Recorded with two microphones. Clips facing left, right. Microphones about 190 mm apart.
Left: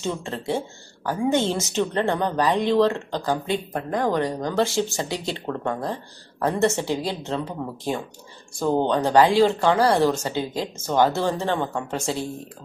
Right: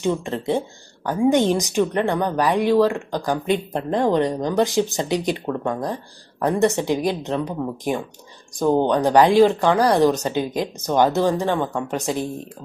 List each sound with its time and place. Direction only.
0.0 s a woman's voice: 15° right (ahead or behind)
5.5 s speech: 5° right (ahead or behind)
6.4 s a woman's voice: 15° right (ahead or behind)